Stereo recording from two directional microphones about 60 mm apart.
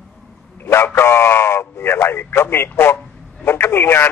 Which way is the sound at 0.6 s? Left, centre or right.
Left.